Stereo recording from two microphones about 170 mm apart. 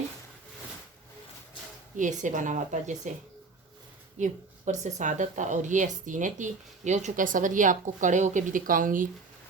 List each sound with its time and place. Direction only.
2.0 s speech: 45° right (ahead or behind)
4.2 s speech: 45° right (ahead or behind)